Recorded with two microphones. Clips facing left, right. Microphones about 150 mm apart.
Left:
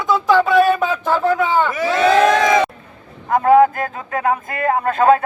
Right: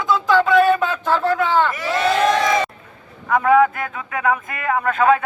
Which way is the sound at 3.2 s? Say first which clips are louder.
Left 3 dB; 40° left (ahead or behind).